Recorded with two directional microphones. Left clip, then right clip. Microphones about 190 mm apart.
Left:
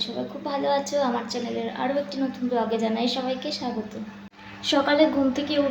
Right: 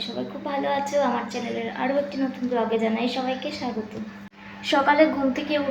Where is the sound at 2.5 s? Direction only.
15° left (ahead or behind).